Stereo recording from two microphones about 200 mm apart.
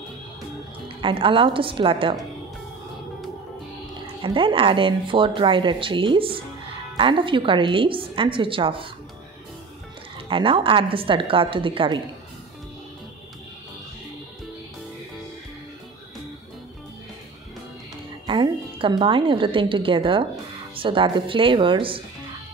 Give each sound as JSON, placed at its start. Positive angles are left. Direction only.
{"t": 0.8, "sound": "speech", "side_deg": -25}
{"t": 4.2, "sound": "speech", "side_deg": -25}
{"t": 10.3, "sound": "speech", "side_deg": -25}
{"t": 18.2, "sound": "a woman's voice", "side_deg": -25}